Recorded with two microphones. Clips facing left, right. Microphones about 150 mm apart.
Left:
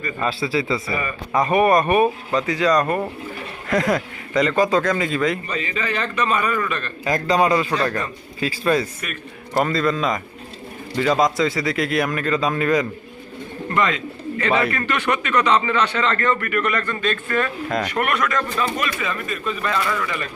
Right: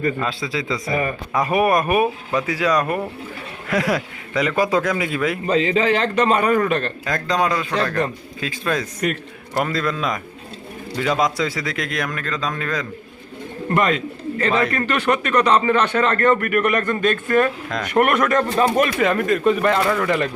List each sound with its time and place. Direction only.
0.2 s a man's voice: 5° left (ahead or behind)
5.5 s a man's voice: 90° right; by 6.9 s 70° right (ahead or behind)
7.0 s a man's voice: 5° left (ahead or behind)
13.7 s speech: 45° right (ahead or behind)
18.0 s a man's voice: 30° right (ahead or behind)
18.5 s speech: 55° right (ahead or behind)